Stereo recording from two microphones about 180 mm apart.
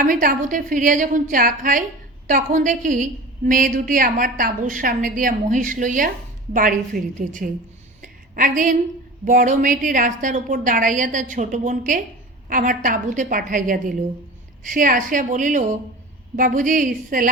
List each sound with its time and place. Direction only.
0.0 s a woman's voice: 50° right (ahead or behind)
8.0 s a sound: 45° right (ahead or behind)
9.2 s a woman's voice: 45° right (ahead or behind)